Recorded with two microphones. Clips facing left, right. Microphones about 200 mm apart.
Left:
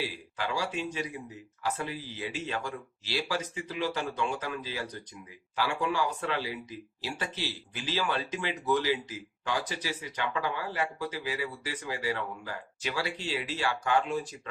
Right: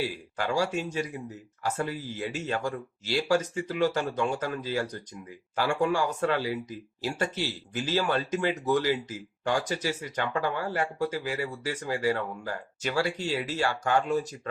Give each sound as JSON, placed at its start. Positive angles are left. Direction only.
{"t": 0.0, "sound": "speech", "side_deg": -45}